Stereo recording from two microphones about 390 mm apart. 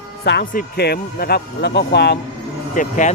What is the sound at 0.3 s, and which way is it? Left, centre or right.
A man's voice, left.